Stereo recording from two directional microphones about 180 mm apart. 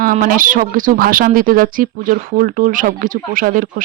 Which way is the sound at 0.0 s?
50° right (ahead or behind).